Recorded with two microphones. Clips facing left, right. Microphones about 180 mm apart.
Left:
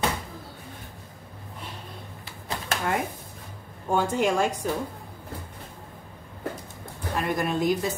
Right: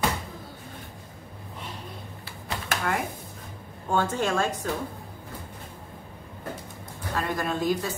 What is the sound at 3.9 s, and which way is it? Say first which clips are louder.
Speech: left 2 dB; 10° left (ahead or behind).